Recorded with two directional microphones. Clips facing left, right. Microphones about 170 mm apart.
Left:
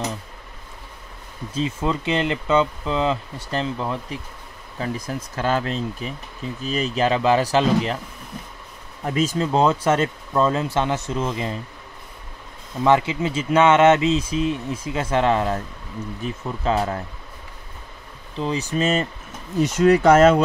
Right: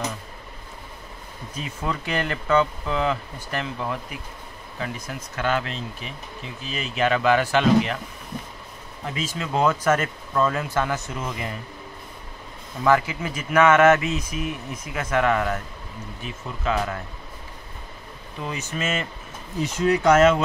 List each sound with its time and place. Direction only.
1.5 s speech: 25° left (ahead or behind)
9.0 s speech: 45° left (ahead or behind); by 11.5 s 25° left (ahead or behind)
12.8 s speech: 25° left (ahead or behind)
16.6 s speech: 30° left (ahead or behind)
18.4 s speech: 30° left (ahead or behind)
19.6 s speech: 45° left (ahead or behind)
20.0 s speech: 35° left (ahead or behind)